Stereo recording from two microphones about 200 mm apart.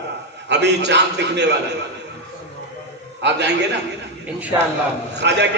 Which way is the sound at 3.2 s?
60° right (ahead or behind).